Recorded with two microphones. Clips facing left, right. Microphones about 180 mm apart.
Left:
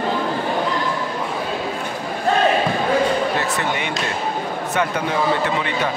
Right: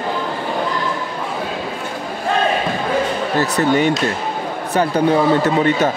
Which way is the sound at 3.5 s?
40° right (ahead or behind).